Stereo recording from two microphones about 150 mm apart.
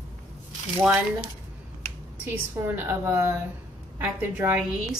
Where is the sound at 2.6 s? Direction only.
15° right (ahead or behind).